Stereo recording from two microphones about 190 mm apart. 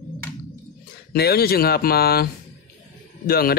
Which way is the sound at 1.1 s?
55° left (ahead or behind).